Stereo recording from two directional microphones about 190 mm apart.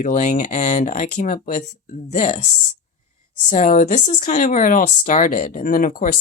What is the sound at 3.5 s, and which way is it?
Speech, 40° left (ahead or behind).